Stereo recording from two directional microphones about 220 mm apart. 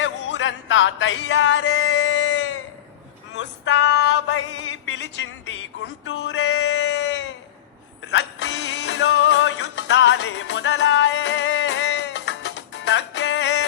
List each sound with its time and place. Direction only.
0.0 s music: 60° left (ahead or behind)
3.3 s male singing: 55° left (ahead or behind)
6.1 s a sound: 55° left (ahead or behind)
8.0 s music: 55° left (ahead or behind)